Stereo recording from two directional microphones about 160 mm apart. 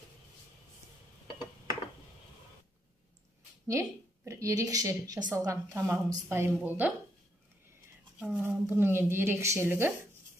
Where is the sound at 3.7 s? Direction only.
20° right (ahead or behind).